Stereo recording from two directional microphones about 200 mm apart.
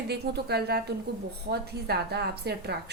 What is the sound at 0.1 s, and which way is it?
A woman's voice, 55° right (ahead or behind).